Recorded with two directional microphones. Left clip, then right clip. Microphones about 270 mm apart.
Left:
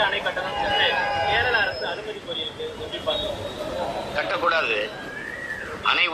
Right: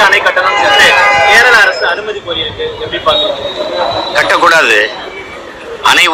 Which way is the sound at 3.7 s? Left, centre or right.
Right.